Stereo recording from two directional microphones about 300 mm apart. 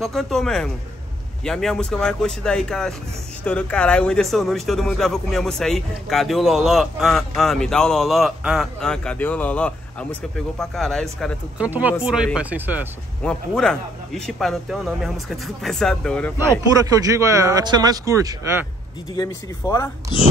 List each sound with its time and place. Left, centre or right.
0.0 s speech: centre
16.8 s speech: centre
19.1 s speech: centre